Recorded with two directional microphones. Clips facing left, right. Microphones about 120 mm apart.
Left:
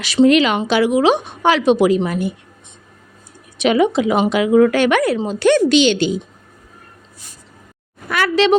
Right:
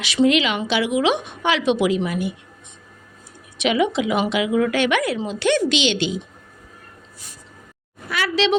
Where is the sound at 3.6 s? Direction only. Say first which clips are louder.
Left 5 dB; 40° left (ahead or behind).